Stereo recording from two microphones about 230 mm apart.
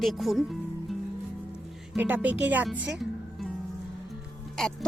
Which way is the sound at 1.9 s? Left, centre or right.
Centre.